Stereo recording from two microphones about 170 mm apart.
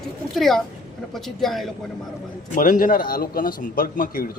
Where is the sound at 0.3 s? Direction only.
Centre (ahead or behind).